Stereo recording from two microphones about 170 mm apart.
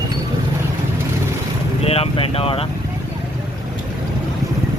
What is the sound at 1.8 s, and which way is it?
Speech, 35° left (ahead or behind).